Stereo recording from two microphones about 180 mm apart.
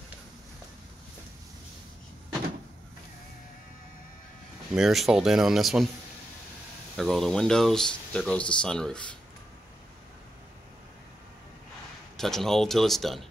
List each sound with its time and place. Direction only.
4.7 s speech: centre (ahead or behind)
7.0 s speech: centre (ahead or behind)
12.2 s speech: centre (ahead or behind)